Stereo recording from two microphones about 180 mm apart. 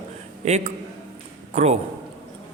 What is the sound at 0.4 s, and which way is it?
A man's voice, 40° right (ahead or behind).